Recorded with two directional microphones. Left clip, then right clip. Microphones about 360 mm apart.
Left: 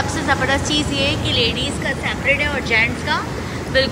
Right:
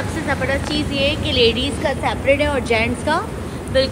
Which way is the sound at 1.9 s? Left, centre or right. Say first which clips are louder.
Right 2 dB; centre.